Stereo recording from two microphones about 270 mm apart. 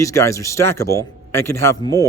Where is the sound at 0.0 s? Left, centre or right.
Centre.